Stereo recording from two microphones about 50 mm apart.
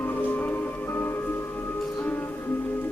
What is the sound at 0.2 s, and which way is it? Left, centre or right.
Music, left.